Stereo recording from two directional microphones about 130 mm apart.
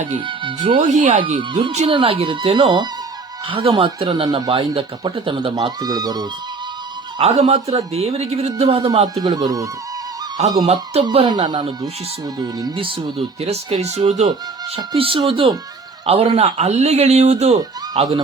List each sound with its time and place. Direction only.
0.3 s speech: 40° right (ahead or behind)
0.8 s speech: 70° right (ahead or behind)
1.4 s speech: 40° right (ahead or behind)
7.2 s speech: 55° right (ahead or behind)
9.2 s speech: 30° right (ahead or behind)
10.4 s speech: 55° right (ahead or behind)
11.3 s speech: 35° right (ahead or behind)
12.7 s speech: 45° right (ahead or behind)
14.9 s speech: 45° right (ahead or behind)